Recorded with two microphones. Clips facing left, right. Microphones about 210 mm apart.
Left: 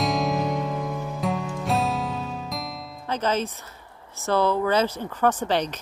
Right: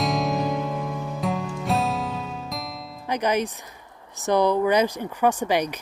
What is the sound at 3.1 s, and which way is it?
Speech, 15° right (ahead or behind).